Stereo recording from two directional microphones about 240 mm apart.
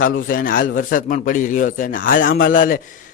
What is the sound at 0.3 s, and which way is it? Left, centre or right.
A man's voice, left.